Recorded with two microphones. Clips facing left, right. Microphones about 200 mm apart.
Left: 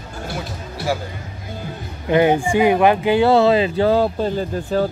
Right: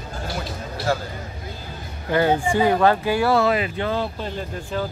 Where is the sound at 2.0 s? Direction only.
20° left (ahead or behind); by 4.9 s 35° left (ahead or behind).